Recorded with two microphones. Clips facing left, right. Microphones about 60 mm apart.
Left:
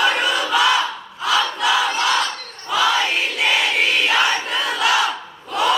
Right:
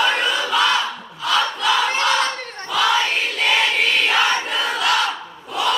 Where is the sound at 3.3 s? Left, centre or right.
Centre.